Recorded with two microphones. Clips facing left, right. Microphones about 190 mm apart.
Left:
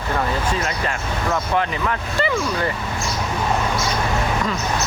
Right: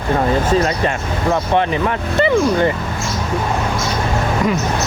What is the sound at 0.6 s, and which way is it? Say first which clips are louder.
Speech: right 6 dB; 25° right (ahead or behind).